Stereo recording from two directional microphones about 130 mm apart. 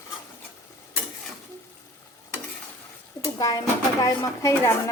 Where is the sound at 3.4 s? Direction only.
30° left (ahead or behind).